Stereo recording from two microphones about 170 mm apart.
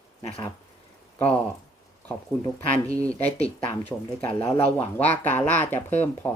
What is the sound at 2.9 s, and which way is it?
Speech, 20° right (ahead or behind).